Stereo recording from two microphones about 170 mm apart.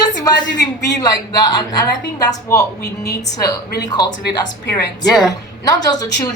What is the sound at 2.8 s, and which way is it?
Speech, 70° left (ahead or behind).